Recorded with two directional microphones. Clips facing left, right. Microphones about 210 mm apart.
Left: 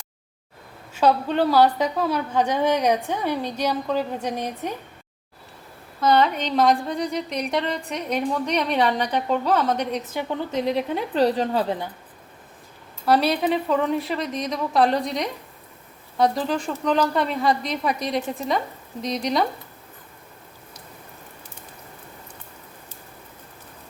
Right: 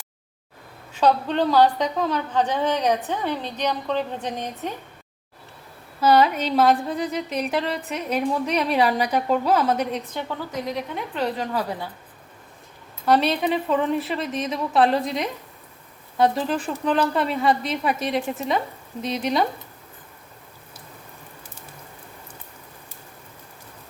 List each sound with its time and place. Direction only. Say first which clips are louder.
0.9 s a woman's voice: even; 5° left (ahead or behind)
6.0 s a woman's voice: right 2 dB; 5° right (ahead or behind)
10.5 s a woman's voice: left 7 dB; 30° left (ahead or behind)
13.1 s a woman's voice: even; centre (ahead or behind)